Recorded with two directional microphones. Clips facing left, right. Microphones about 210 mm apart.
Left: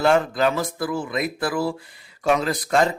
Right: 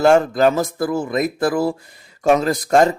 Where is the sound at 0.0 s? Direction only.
45° right (ahead or behind).